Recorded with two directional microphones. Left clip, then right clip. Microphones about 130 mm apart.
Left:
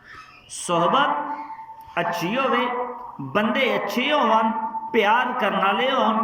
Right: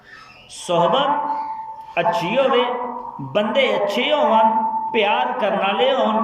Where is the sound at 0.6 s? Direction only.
15° right (ahead or behind).